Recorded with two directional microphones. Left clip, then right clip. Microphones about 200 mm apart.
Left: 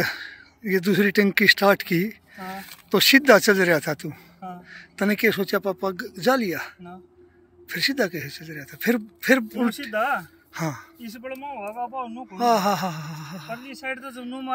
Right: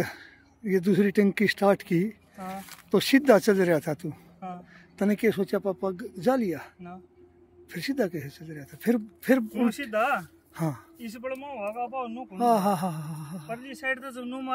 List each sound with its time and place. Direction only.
0.0 s speech: 10° right (ahead or behind)
9.5 s speech: 5° left (ahead or behind)
10.5 s speech: 15° right (ahead or behind)
11.0 s speech: centre (ahead or behind)
12.4 s speech: 15° right (ahead or behind)
13.9 s speech: 5° left (ahead or behind)